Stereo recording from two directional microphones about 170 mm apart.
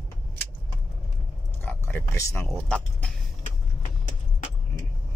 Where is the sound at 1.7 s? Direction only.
10° left (ahead or behind).